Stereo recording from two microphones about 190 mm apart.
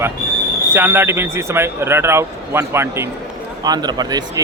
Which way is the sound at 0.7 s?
10° right (ahead or behind).